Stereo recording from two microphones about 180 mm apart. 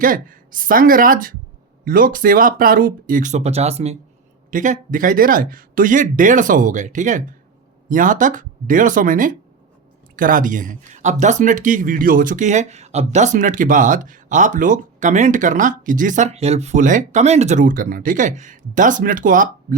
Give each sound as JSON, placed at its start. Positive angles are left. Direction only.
{"t": 0.0, "sound": "speech", "side_deg": -50}
{"t": 4.5, "sound": "speech", "side_deg": -45}